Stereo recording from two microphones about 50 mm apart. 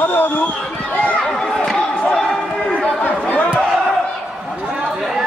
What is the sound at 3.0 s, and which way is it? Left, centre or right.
Chatter, left.